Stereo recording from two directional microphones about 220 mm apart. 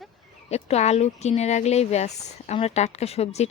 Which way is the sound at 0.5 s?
30° left (ahead or behind).